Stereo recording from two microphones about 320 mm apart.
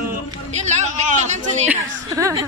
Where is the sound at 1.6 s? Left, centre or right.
Centre.